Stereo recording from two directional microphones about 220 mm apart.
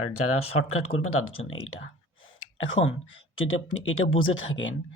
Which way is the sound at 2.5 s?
60° left (ahead or behind).